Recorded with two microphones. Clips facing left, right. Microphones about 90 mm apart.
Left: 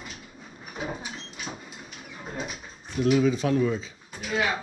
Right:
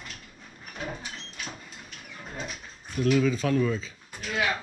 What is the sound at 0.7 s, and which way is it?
Sliding door, 10° left (ahead or behind).